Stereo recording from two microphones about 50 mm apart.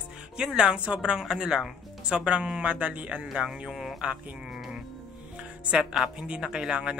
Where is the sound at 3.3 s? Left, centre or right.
Centre.